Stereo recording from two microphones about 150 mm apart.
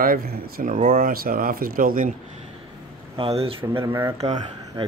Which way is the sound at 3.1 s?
40° right (ahead or behind).